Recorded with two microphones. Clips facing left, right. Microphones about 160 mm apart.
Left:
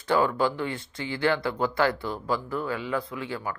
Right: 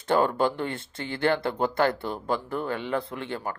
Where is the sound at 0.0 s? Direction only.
50° right (ahead or behind).